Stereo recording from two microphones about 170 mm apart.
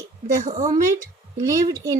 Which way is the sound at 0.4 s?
45° right (ahead or behind).